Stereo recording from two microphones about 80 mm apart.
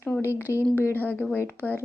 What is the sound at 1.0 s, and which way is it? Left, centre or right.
Speech, left.